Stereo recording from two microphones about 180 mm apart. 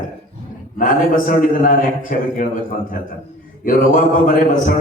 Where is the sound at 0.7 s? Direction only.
50° left (ahead or behind).